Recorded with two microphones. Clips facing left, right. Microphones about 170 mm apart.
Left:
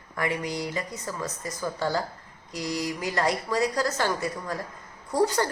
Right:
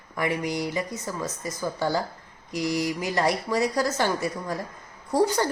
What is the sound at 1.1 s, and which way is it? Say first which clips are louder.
Speech: right 2 dB; 5° right (ahead or behind).